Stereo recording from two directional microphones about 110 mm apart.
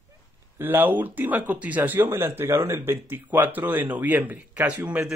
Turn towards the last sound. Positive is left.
turn(degrees=-10)  # may be behind; listen again after turning